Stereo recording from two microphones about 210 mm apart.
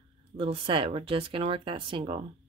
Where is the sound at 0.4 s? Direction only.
25° right (ahead or behind).